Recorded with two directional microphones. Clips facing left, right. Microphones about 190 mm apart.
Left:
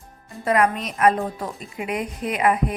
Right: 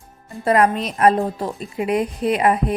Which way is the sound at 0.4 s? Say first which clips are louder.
Right 3 dB; 35° right (ahead or behind).